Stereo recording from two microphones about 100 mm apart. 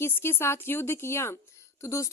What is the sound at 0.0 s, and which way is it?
A woman's voice, 25° left (ahead or behind).